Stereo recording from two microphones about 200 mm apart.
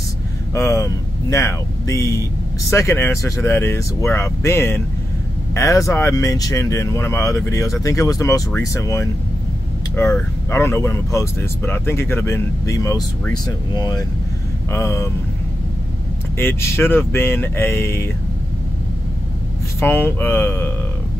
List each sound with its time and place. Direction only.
0.6 s speech: 15° left (ahead or behind)
16.3 s speech: 10° left (ahead or behind)
19.8 s speech: 10° left (ahead or behind)